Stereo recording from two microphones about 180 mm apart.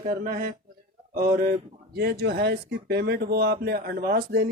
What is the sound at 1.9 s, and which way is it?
Speech, 60° right (ahead or behind).